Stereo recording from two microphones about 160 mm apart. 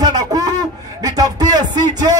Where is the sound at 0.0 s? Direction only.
25° right (ahead or behind).